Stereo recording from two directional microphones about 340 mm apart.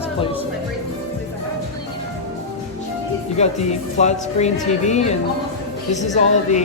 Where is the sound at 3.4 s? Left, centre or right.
Centre.